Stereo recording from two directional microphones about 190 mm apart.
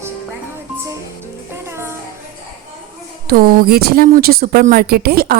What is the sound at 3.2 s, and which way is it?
Speech, 50° right (ahead or behind).